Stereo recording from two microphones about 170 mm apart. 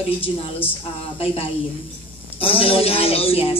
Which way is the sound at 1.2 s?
35° left (ahead or behind).